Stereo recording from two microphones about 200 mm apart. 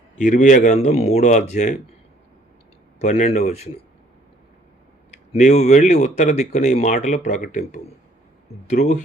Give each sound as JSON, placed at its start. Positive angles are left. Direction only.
{"t": 0.2, "sound": "speech", "side_deg": 40}
{"t": 3.0, "sound": "speech", "side_deg": 35}
{"t": 5.1, "sound": "speech", "side_deg": 35}